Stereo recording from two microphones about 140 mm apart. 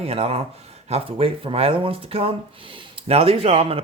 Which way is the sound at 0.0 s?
45° right (ahead or behind).